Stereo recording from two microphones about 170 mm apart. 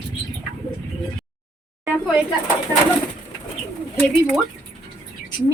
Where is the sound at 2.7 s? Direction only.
20° right (ahead or behind).